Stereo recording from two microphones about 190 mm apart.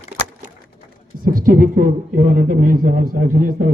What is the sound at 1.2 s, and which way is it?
A man's voice, 50° right (ahead or behind).